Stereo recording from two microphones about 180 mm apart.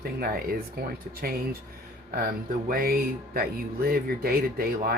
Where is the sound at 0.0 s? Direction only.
55° right (ahead or behind).